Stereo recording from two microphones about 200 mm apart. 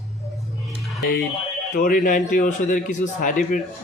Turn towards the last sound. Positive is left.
turn(degrees=40)  # may be behind; listen again after turning